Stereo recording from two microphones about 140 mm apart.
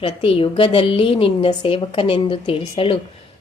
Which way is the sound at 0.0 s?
40° left (ahead or behind).